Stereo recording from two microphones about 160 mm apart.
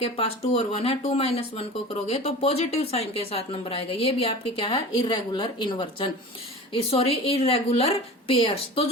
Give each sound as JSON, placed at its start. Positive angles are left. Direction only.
{"t": 0.0, "sound": "speech", "side_deg": 40}